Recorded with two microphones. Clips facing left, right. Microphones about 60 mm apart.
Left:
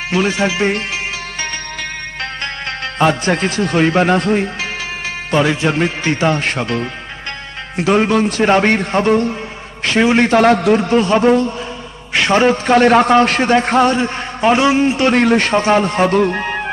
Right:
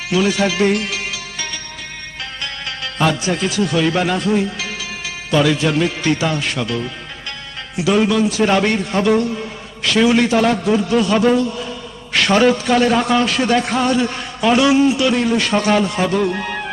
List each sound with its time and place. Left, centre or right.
0.1 s a man's voice: left
2.4 s music: left
3.2 s speech: left
5.3 s a man's voice: left
9.4 s a sound: left
10.6 s speech: left
10.9 s a man's voice: left
15.4 s a man's voice: left